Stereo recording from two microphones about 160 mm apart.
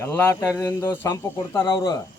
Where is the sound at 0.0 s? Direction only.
15° left (ahead or behind).